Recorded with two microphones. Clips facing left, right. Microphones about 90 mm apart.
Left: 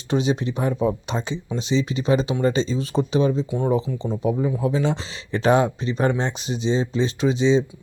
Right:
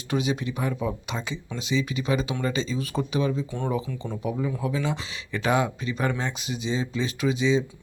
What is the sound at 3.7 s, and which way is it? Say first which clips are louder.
Speech: left 6 dB; 25° left (ahead or behind).